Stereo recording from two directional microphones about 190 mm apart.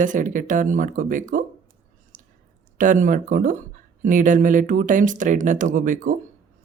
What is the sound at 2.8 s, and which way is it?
Speech, 45° right (ahead or behind).